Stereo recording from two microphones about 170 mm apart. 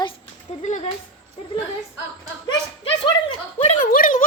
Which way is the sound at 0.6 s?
45° left (ahead or behind).